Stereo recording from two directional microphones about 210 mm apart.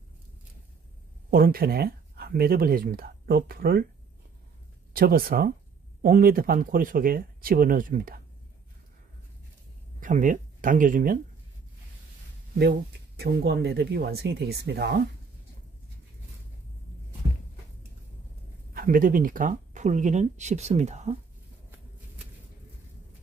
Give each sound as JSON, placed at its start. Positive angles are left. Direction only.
{"t": 1.3, "sound": "speech", "side_deg": -45}
{"t": 4.9, "sound": "speech", "side_deg": -45}
{"t": 9.9, "sound": "speech", "side_deg": -35}
{"t": 12.5, "sound": "speech", "side_deg": -50}
{"t": 18.7, "sound": "speech", "side_deg": -45}